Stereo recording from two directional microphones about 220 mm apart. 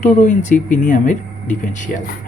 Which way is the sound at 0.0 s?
35° left (ahead or behind).